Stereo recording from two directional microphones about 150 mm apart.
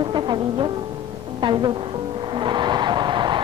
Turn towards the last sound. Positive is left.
turn(degrees=-30)  # may be behind; listen again after turning